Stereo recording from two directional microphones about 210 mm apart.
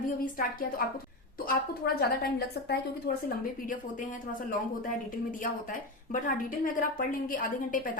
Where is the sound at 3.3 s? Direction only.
40° left (ahead or behind).